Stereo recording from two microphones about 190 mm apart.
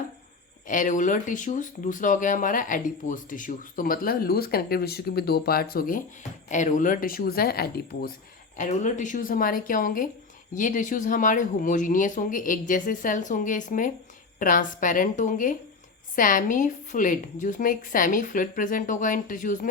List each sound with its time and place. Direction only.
0.7 s speech: 40° left (ahead or behind)
8.5 s speech: 40° left (ahead or behind)